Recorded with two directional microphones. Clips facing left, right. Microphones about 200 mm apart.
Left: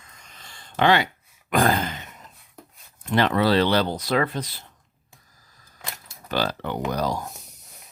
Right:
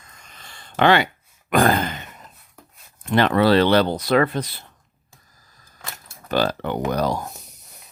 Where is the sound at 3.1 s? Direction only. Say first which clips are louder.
Right 4 dB; 60° right (ahead or behind).